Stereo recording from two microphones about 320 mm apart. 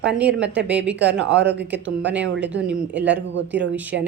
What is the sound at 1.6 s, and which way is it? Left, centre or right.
Speech, centre.